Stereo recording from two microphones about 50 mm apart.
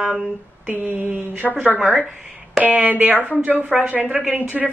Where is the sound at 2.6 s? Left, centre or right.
Right.